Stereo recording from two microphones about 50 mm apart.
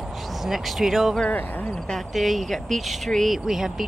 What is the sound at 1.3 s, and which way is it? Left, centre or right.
Speech, left.